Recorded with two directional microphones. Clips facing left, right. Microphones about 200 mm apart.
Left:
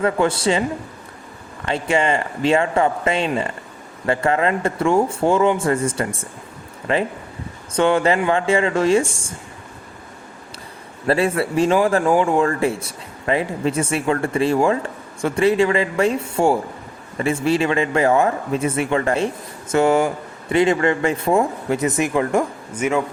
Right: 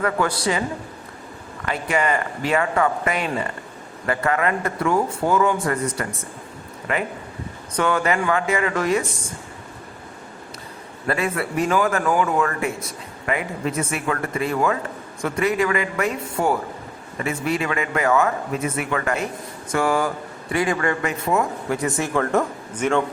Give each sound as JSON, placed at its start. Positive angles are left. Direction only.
{"t": 0.0, "sound": "a man's voice", "side_deg": 25}
{"t": 1.6, "sound": "a man's voice", "side_deg": 25}
{"t": 11.0, "sound": "a man's voice", "side_deg": 30}